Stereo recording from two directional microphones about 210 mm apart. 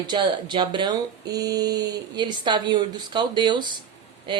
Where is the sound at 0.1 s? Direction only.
20° right (ahead or behind).